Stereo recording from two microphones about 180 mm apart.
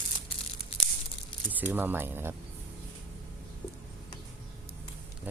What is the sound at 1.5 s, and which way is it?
Speech, 10° right (ahead or behind).